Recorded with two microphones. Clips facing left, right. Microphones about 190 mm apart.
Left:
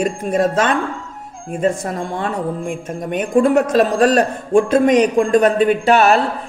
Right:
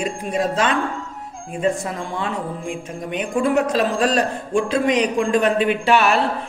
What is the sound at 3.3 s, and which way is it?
A man's voice, 45° left (ahead or behind).